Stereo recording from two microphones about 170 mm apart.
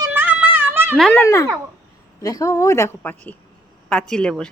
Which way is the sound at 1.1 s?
15° left (ahead or behind).